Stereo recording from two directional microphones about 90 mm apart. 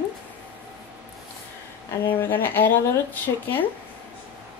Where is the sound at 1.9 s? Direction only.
25° left (ahead or behind).